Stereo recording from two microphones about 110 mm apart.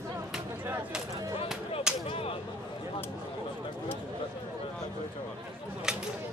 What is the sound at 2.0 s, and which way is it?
Whip, 60° left (ahead or behind).